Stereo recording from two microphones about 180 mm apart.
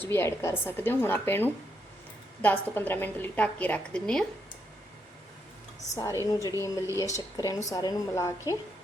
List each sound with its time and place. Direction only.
0.0 s a woman's voice: 15° left (ahead or behind)
5.9 s speech: 20° left (ahead or behind)